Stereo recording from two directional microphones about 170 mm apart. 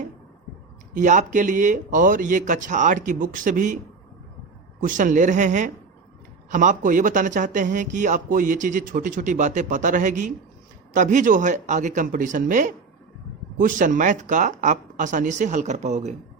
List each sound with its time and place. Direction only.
0.9 s a man's voice: 50° right (ahead or behind)
4.8 s a man's voice: 50° right (ahead or behind)